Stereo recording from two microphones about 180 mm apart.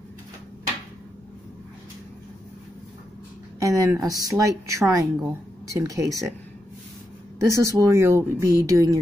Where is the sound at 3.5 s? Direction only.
20° right (ahead or behind).